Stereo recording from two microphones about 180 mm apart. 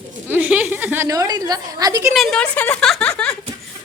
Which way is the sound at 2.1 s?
5° left (ahead or behind).